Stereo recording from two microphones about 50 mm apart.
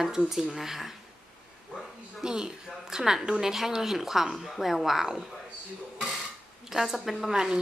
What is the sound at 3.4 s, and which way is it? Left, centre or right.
Speech, centre.